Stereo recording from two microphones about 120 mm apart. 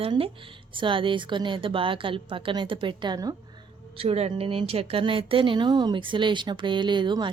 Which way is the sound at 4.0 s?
55° right (ahead or behind).